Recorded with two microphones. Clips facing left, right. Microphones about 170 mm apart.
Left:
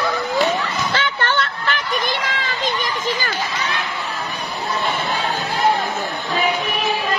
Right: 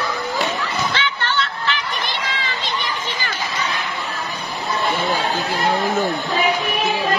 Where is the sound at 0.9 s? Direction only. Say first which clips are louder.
Left 2 dB; 45° left (ahead or behind).